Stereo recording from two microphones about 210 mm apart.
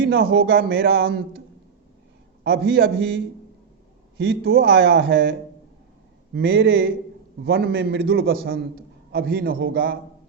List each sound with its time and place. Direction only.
0.0 s speech: 50° right (ahead or behind)
2.4 s speech: 50° right (ahead or behind)
4.4 s speech: 45° right (ahead or behind)
6.3 s speech: 60° right (ahead or behind); by 10.0 s 45° right (ahead or behind)